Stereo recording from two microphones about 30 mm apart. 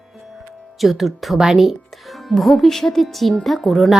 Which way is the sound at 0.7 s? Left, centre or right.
Centre.